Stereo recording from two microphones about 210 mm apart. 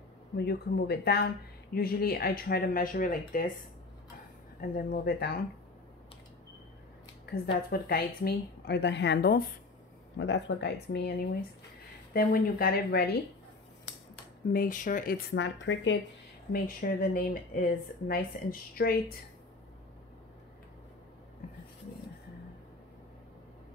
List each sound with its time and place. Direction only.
0.4 s speech: 50° left (ahead or behind)
4.6 s speech: 45° left (ahead or behind)
7.2 s speech: 45° left (ahead or behind)
10.1 s speech: 60° left (ahead or behind)
14.5 s speech: 40° left (ahead or behind)
15.3 s speech: 60° left (ahead or behind)
16.5 s speech: 45° left (ahead or behind)